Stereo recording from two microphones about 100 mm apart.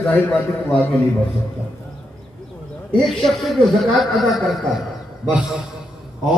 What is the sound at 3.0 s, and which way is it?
A man's voice, centre (ahead or behind).